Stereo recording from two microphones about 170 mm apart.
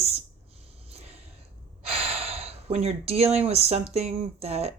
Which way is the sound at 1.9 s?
35° right (ahead or behind).